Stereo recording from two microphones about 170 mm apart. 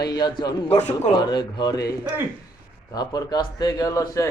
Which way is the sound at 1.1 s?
25° left (ahead or behind).